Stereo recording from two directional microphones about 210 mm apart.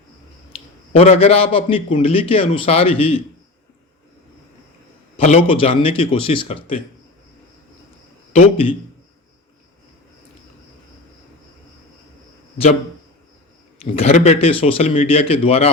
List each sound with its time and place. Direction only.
0.5 s a man's voice: 30° left (ahead or behind)
5.1 s a man's voice: 30° left (ahead or behind)
8.3 s speech: 30° left (ahead or behind)
13.9 s a man's voice: 30° left (ahead or behind)